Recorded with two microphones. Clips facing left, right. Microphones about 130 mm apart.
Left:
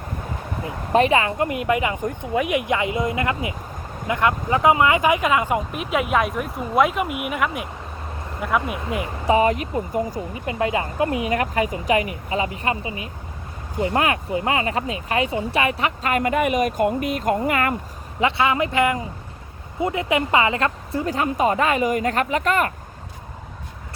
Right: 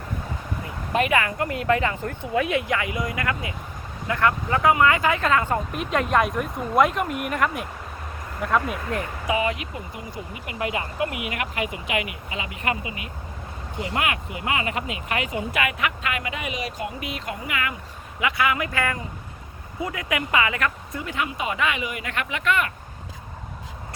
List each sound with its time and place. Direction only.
0.9 s speech: 30° left (ahead or behind); by 9.0 s 5° left (ahead or behind)
9.2 s speech: 35° left (ahead or behind)
10.4 s speech: 30° left (ahead or behind); by 17.7 s 45° left (ahead or behind)
18.2 s speech: 30° left (ahead or behind)